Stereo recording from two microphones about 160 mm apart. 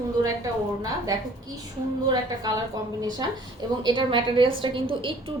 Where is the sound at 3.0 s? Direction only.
25° right (ahead or behind).